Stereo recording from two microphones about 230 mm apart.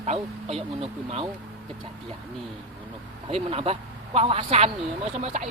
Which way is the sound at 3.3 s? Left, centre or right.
Right.